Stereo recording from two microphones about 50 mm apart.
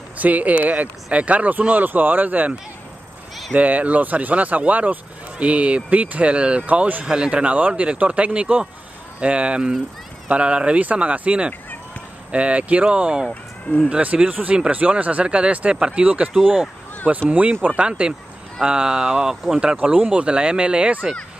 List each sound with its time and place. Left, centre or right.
0.2 s speech: right
3.5 s speech: right
7.1 s speech: centre
17.3 s speech: right